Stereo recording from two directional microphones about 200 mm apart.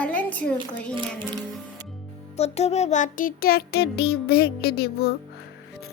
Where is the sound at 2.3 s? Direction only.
30° left (ahead or behind); by 4.1 s 55° left (ahead or behind).